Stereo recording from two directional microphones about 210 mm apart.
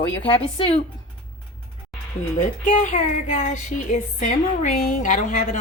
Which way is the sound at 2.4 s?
35° left (ahead or behind).